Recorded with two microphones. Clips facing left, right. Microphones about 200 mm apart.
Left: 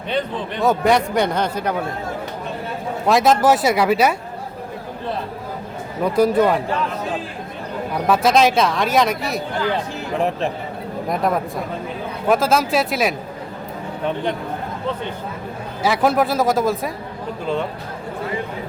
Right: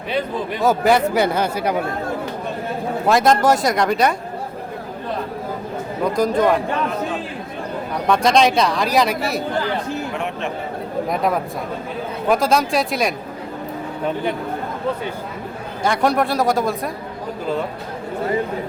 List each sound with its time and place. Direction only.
0.1 s a man's voice: 5° right (ahead or behind)
3.1 s a man's voice: centre (ahead or behind)
6.1 s a man's voice: 5° left (ahead or behind)
8.0 s a man's voice: 5° left (ahead or behind)
10.2 s speech: 35° left (ahead or behind)
11.1 s a man's voice: centre (ahead or behind)
15.8 s a man's voice: 5° left (ahead or behind)